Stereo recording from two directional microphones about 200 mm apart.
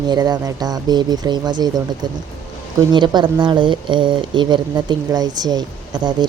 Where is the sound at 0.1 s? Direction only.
20° right (ahead or behind).